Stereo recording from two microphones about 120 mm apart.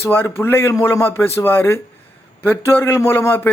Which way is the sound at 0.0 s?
20° left (ahead or behind).